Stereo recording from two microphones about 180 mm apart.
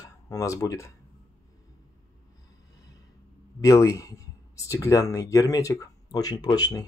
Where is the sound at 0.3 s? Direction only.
15° left (ahead or behind).